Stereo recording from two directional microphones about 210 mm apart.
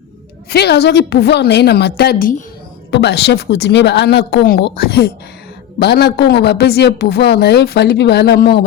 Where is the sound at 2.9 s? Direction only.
55° left (ahead or behind).